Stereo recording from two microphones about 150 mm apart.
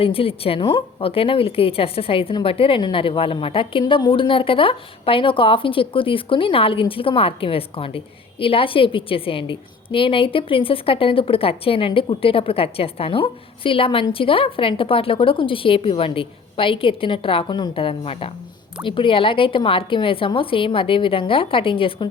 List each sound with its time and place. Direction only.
0.0 s a woman's voice: 40° left (ahead or behind)